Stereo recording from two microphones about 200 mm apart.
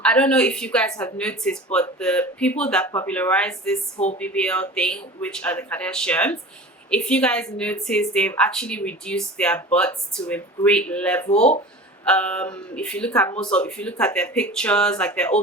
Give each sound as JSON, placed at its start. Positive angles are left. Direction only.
{"t": 0.0, "sound": "speech", "side_deg": 5}
{"t": 11.3, "sound": "speech", "side_deg": 30}
{"t": 12.0, "sound": "speech", "side_deg": 5}